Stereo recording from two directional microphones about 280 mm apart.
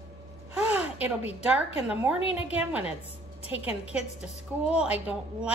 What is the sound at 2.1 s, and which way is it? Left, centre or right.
Speech, centre.